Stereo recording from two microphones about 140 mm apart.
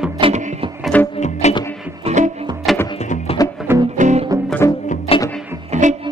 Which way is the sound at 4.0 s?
55° right (ahead or behind).